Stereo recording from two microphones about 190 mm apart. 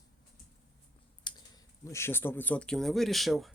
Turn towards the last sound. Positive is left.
turn(degrees=0)  # may be behind; listen again after turning